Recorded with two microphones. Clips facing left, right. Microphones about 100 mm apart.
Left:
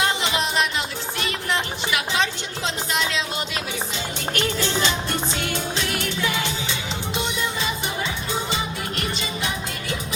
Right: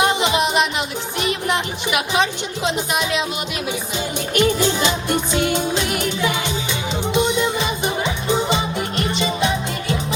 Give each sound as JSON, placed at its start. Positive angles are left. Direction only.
{"t": 0.0, "sound": "music", "side_deg": -20}
{"t": 1.2, "sound": "speech", "side_deg": -20}
{"t": 2.6, "sound": "music", "side_deg": -15}
{"t": 4.4, "sound": "music", "side_deg": -15}